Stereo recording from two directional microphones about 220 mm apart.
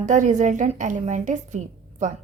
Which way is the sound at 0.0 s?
35° right (ahead or behind).